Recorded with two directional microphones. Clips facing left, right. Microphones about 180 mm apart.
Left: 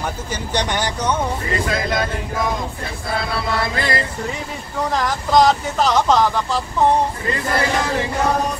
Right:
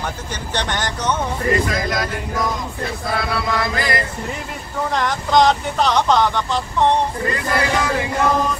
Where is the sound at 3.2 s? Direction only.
30° left (ahead or behind).